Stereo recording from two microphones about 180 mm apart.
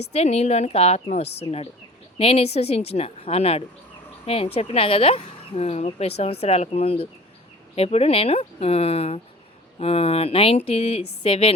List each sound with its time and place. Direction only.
0.1 s speech: 35° left (ahead or behind)